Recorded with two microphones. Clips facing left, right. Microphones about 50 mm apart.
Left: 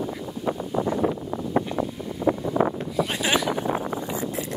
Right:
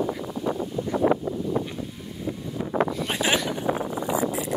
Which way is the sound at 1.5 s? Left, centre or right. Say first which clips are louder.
Left 3 dB; left.